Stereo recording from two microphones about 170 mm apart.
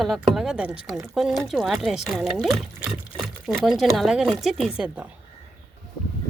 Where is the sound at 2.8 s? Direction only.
5° right (ahead or behind).